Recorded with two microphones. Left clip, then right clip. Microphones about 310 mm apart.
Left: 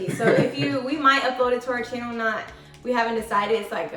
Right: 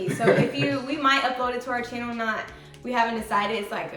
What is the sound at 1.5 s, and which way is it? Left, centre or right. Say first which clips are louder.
A woman's voice: left 3 dB; centre.